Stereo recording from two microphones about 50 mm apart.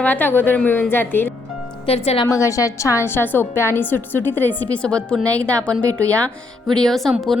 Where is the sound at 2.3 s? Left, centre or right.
Left.